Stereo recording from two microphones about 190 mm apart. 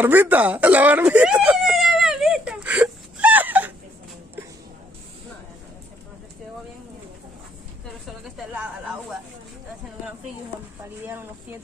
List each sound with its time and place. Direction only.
0.0 s whimper: 10° right (ahead or behind)